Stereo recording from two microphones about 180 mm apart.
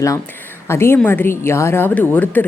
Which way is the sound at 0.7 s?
15° left (ahead or behind).